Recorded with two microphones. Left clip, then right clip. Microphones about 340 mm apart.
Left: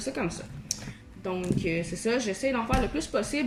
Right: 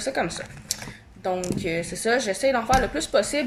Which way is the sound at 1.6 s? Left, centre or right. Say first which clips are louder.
Right 3 dB; right.